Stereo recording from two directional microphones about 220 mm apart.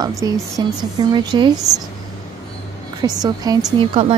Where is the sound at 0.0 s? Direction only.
15° right (ahead or behind).